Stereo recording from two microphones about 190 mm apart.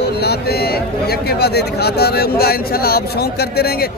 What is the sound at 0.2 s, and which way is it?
Speech, 55° left (ahead or behind).